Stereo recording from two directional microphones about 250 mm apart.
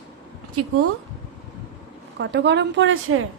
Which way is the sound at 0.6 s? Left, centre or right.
Right.